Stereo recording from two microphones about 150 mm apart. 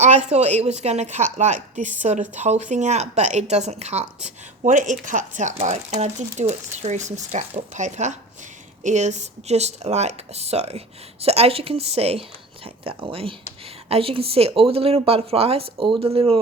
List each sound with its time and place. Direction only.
0.0 s speech: 50° right (ahead or behind)